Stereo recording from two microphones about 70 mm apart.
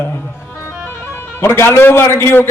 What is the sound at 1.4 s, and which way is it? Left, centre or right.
A man's voice, left.